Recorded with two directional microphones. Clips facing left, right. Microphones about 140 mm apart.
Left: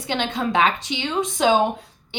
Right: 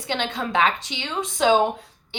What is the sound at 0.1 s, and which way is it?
A woman's voice, 15° left (ahead or behind).